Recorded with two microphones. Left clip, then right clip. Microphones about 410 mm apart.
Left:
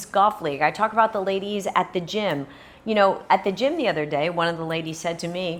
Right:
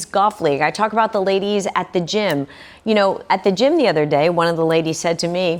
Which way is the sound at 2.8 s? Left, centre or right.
Right.